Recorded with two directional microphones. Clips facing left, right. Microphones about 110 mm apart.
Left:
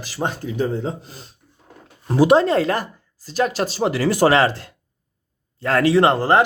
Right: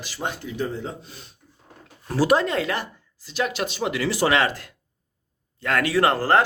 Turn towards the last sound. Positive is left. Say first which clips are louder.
# left 4 dB
turn(degrees=20)  # may be behind; listen again after turning